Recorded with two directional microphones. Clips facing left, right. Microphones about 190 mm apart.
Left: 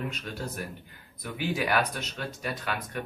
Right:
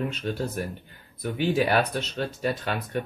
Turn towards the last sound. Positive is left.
turn(degrees=-30)  # may be behind; listen again after turning